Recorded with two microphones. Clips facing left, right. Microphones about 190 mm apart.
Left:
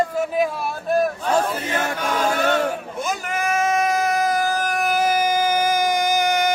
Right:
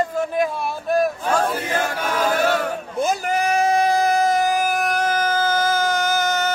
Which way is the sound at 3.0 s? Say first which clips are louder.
Right 7 dB; 35° right (ahead or behind).